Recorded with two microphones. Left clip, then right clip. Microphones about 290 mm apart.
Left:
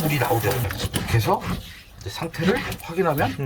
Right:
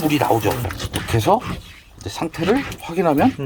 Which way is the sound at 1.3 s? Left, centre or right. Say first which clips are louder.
Right 7 dB; right.